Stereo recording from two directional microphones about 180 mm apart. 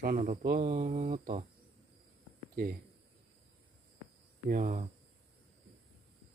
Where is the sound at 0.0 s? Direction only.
50° right (ahead or behind).